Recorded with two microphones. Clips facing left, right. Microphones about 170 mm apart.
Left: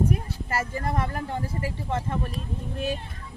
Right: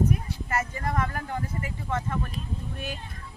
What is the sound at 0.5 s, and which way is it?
Speech, 30° left (ahead or behind).